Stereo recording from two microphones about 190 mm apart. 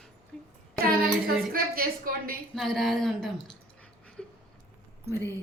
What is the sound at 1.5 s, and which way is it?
Speech, 50° right (ahead or behind).